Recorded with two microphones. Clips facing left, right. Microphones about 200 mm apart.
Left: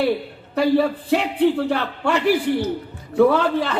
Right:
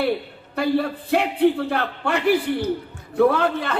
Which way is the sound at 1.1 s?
55° right (ahead or behind).